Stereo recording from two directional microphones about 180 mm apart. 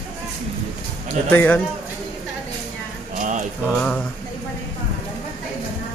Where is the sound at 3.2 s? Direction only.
45° right (ahead or behind).